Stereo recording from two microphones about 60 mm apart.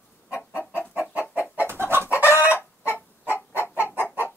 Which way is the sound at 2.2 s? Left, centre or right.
Left.